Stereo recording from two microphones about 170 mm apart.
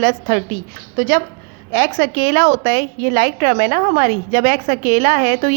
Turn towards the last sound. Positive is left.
turn(degrees=-55)  # may be behind; listen again after turning